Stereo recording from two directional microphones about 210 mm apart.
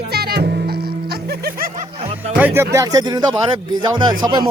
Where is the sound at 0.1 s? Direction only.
50° right (ahead or behind).